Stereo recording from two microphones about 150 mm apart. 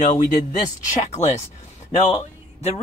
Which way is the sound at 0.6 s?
50° left (ahead or behind).